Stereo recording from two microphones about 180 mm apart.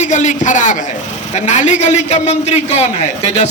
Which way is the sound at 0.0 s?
40° left (ahead or behind).